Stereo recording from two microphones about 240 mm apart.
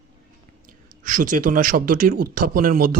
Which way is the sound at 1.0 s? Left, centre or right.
Right.